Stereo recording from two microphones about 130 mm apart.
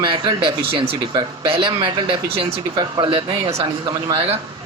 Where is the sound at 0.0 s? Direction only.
40° right (ahead or behind).